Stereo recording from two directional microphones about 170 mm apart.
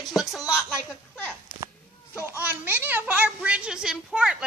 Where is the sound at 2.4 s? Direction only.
10° right (ahead or behind).